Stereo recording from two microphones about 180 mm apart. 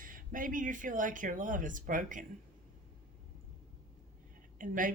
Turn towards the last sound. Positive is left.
turn(degrees=-50)  # may be behind; listen again after turning